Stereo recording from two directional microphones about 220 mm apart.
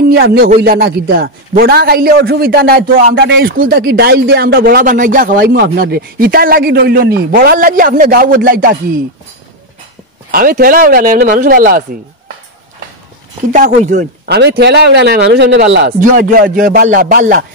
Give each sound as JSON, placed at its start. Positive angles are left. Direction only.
{"t": 0.1, "sound": "a man's voice", "side_deg": -45}
{"t": 10.3, "sound": "speech", "side_deg": -40}
{"t": 13.5, "sound": "speech", "side_deg": -35}
{"t": 14.2, "sound": "a man's voice", "side_deg": -50}
{"t": 16.0, "sound": "speech", "side_deg": -40}